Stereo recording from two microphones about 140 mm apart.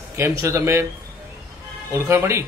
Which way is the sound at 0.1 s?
20° right (ahead or behind).